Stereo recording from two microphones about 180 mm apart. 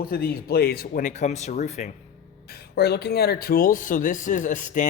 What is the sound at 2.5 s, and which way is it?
Speech, 60° left (ahead or behind).